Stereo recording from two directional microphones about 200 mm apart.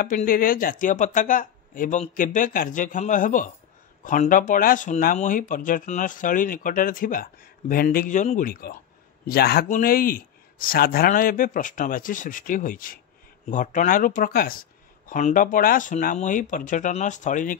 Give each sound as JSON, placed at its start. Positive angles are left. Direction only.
{"t": 0.0, "sound": "speech", "side_deg": 45}